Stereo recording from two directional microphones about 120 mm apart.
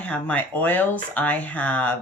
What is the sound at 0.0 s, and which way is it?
Speech, 10° left (ahead or behind).